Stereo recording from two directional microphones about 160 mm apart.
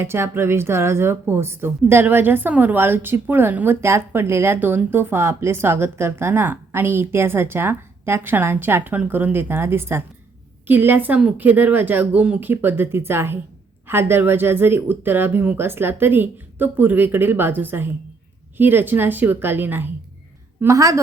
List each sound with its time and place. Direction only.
0.0 s a woman's voice: 15° right (ahead or behind)